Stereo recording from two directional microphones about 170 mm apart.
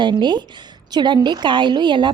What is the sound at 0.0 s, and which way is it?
A woman's voice, 25° right (ahead or behind).